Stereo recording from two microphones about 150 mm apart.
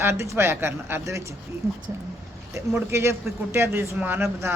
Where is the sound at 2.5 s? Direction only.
15° right (ahead or behind).